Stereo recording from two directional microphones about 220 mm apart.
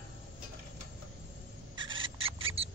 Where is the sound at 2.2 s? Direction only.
25° right (ahead or behind).